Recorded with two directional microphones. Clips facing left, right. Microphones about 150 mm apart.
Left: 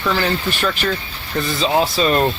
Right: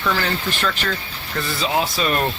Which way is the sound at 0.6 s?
15° left (ahead or behind).